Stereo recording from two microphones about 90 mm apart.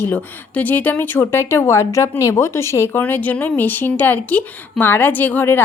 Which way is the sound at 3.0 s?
15° left (ahead or behind).